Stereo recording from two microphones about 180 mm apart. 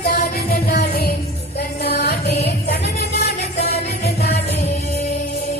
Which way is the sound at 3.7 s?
65° left (ahead or behind).